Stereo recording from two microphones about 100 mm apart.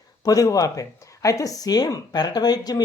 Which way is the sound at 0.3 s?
35° left (ahead or behind).